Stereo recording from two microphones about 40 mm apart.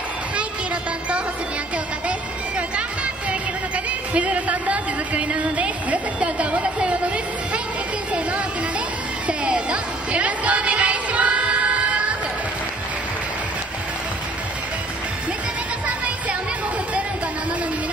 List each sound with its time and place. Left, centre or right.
2.0 s music: right
3.3 s a sound: right
8.1 s music: right